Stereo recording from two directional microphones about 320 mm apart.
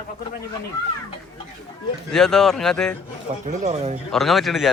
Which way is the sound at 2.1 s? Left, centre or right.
Centre.